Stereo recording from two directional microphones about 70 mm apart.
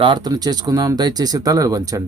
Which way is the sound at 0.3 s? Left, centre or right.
Right.